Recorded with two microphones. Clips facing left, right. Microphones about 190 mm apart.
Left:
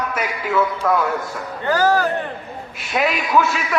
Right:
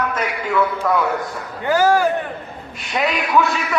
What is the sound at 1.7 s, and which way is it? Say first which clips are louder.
Speech: right 2 dB; 10° right (ahead or behind).